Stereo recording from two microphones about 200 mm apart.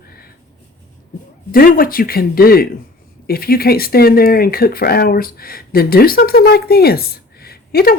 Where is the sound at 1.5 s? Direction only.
45° left (ahead or behind).